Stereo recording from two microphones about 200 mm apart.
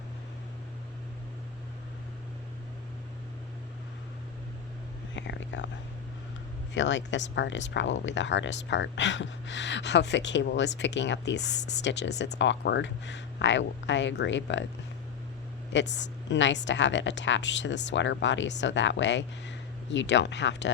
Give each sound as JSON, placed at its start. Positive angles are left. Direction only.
{"t": 5.1, "sound": "speech", "side_deg": 65}
{"t": 6.7, "sound": "speech", "side_deg": 65}
{"t": 16.0, "sound": "a woman's voice", "side_deg": 65}